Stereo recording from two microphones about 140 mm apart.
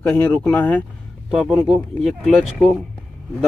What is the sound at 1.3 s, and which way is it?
Speech, 5° right (ahead or behind).